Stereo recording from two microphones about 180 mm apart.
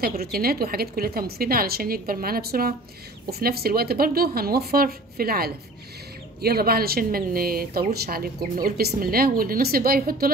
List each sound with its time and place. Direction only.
0.2 s speech: 55° right (ahead or behind)